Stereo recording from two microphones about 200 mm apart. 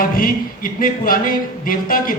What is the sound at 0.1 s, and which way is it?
Speech, 45° left (ahead or behind).